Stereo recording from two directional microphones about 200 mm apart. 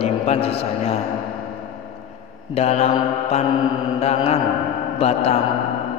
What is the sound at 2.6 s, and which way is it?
Speech, 30° left (ahead or behind).